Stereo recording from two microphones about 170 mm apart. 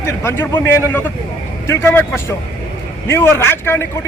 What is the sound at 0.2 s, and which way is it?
Speech, 15° left (ahead or behind).